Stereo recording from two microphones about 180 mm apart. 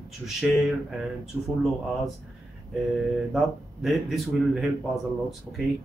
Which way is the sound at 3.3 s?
Centre (ahead or behind).